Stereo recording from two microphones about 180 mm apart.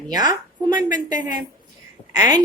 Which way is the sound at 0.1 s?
20° right (ahead or behind).